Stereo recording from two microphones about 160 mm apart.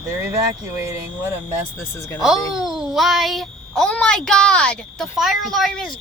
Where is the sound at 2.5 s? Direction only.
5° right (ahead or behind).